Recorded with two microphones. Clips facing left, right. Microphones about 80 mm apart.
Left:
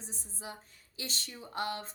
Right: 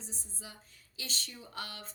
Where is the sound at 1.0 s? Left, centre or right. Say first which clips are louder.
Left 2 dB; left.